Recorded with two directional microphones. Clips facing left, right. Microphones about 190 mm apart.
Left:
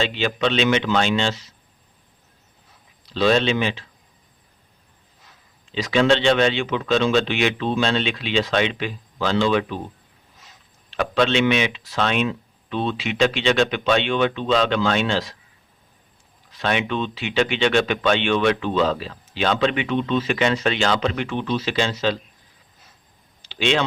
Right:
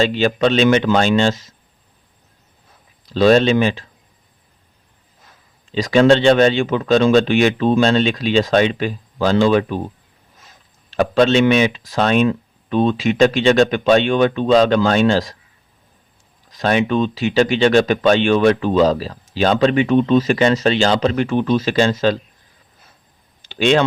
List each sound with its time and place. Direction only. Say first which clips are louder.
0.0 s speech: right 6 dB; 45° right (ahead or behind)
3.1 s speech: right 6 dB; 45° right (ahead or behind)
5.7 s speech: right 6 dB; 45° right (ahead or behind)
10.9 s speech: right 6 dB; 45° right (ahead or behind)
16.5 s speech: right 6 dB; 40° right (ahead or behind)
23.4 s a sound: right 6 dB; 50° right (ahead or behind)